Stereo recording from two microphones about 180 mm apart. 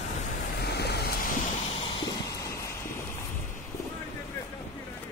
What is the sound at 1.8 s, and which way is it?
Vehicle, 25° left (ahead or behind).